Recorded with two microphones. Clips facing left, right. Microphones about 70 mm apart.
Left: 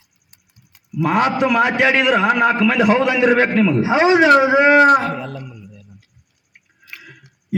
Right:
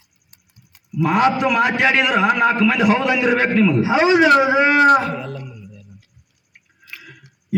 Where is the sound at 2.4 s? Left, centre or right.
Left.